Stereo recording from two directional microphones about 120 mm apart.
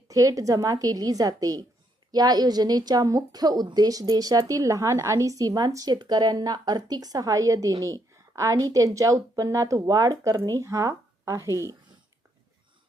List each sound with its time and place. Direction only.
0.1 s a woman's voice: 30° right (ahead or behind)